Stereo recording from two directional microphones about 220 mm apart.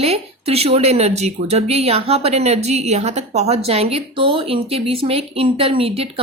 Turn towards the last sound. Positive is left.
turn(degrees=-25)  # may be behind; listen again after turning